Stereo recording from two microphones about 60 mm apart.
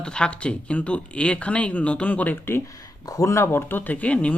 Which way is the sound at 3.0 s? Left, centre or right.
Left.